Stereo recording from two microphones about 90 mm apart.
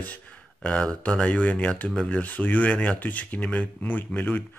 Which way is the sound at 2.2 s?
20° left (ahead or behind).